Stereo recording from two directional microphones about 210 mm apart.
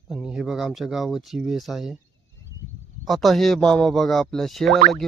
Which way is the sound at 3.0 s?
Centre (ahead or behind).